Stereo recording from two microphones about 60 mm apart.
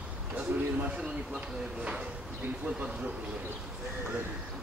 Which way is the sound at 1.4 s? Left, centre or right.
Centre.